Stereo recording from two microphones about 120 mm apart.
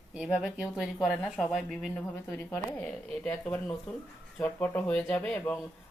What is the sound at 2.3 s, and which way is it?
A woman's voice, 15° left (ahead or behind).